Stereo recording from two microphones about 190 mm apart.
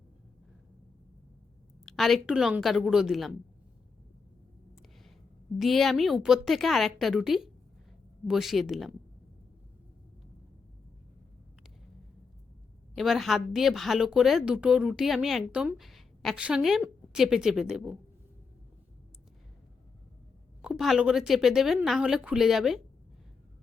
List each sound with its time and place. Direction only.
1.8 s a woman's voice: centre (ahead or behind)
5.5 s a woman's voice: centre (ahead or behind)
13.0 s a woman's voice: centre (ahead or behind)
20.6 s a woman's voice: centre (ahead or behind)